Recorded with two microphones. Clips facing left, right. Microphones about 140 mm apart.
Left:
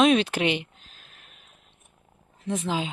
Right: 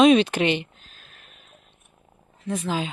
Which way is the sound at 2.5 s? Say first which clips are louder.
Right 1 dB; 20° left (ahead or behind).